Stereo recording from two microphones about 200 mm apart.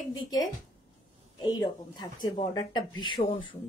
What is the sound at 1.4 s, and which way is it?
Speech, 20° left (ahead or behind).